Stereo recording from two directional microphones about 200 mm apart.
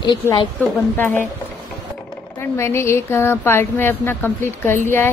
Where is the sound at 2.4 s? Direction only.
15° left (ahead or behind).